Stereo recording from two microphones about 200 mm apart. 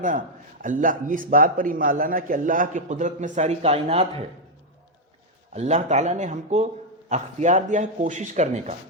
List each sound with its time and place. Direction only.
0.0 s a man's voice: 40° right (ahead or behind)
5.5 s speech: 35° right (ahead or behind)